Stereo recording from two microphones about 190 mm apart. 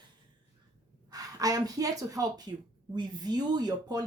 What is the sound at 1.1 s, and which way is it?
Speech, 20° right (ahead or behind).